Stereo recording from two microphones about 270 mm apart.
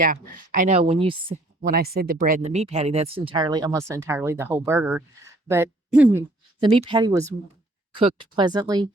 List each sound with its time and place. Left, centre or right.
0.0 s speech: right
1.6 s speech: right; by 6.7 s centre
6.7 s speech: centre